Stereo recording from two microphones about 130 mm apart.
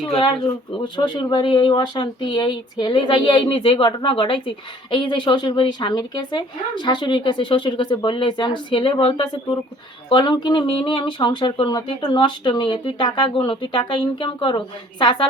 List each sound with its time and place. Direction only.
0.9 s speech: 35° left (ahead or behind)